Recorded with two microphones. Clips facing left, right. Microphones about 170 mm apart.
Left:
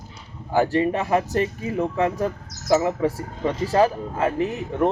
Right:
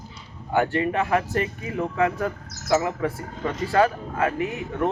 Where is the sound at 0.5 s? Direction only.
30° left (ahead or behind).